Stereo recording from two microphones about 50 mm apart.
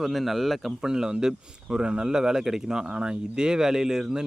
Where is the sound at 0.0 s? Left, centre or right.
Centre.